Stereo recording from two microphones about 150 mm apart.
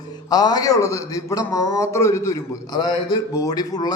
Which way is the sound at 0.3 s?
25° left (ahead or behind).